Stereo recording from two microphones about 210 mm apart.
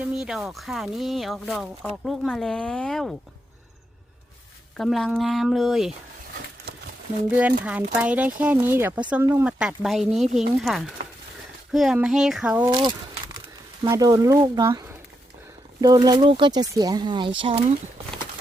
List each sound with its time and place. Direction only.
0.0 s speech: 5° right (ahead or behind)
4.8 s speech: centre (ahead or behind)
7.3 s speech: 5° right (ahead or behind)
12.7 s a sound: 20° right (ahead or behind)
13.8 s speech: 15° right (ahead or behind)